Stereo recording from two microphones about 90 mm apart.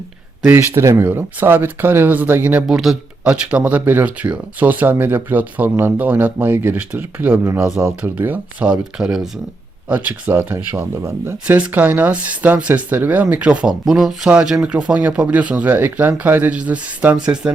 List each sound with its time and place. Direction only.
0.8 s speech: 30° right (ahead or behind)
2.6 s speech: 5° right (ahead or behind); by 8.1 s 30° right (ahead or behind)
8.1 s speech: 20° right (ahead or behind)
9.9 s speech: 20° right (ahead or behind)
13.8 s speech: 5° right (ahead or behind)